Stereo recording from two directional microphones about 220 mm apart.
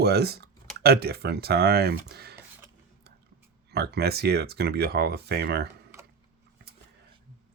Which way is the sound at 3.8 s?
45° right (ahead or behind).